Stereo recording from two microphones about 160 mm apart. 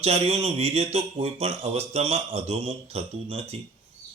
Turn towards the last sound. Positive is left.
turn(degrees=-40)  # may be behind; listen again after turning